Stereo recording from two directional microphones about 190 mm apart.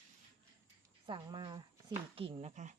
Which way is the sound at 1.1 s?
25° right (ahead or behind).